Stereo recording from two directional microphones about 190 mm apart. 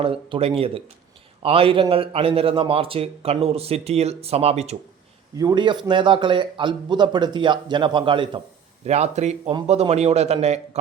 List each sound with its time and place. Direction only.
0.0 s a man's voice: 30° right (ahead or behind)
5.4 s a man's voice: 20° right (ahead or behind)